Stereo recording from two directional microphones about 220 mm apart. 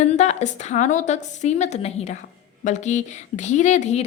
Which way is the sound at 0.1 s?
30° left (ahead or behind).